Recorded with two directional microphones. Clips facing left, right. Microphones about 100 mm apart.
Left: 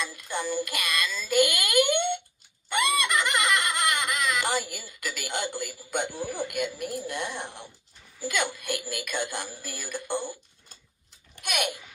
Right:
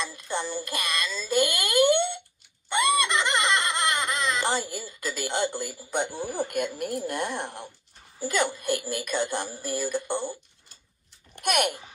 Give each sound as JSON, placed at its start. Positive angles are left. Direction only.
{"t": 0.0, "sound": "a child's voice", "side_deg": -30}
{"t": 2.7, "sound": "baby laughter", "side_deg": -20}
{"t": 5.1, "sound": "speech", "side_deg": -35}
{"t": 5.9, "sound": "a child's voice", "side_deg": -20}
{"t": 6.3, "sound": "speech", "side_deg": -45}
{"t": 8.2, "sound": "speech", "side_deg": -40}
{"t": 9.8, "sound": "a child's voice", "side_deg": -20}
{"t": 11.3, "sound": "a child's voice", "side_deg": -50}